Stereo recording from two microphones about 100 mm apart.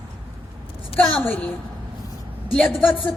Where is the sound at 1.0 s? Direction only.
15° left (ahead or behind).